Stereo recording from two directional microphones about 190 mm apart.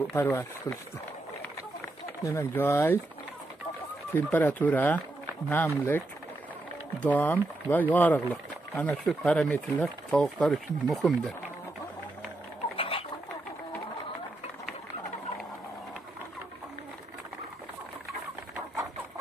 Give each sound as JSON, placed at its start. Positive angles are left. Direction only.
{"t": 0.1, "sound": "speech", "side_deg": 15}
{"t": 2.2, "sound": "speech", "side_deg": 15}
{"t": 4.1, "sound": "speech", "side_deg": 10}
{"t": 12.7, "sound": "a sound", "side_deg": 30}